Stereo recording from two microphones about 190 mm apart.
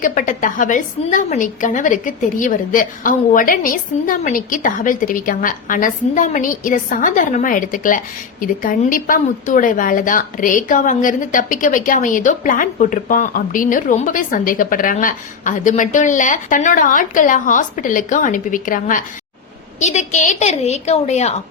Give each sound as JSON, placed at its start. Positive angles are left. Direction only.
{"t": 0.0, "sound": "a woman's voice", "side_deg": 45}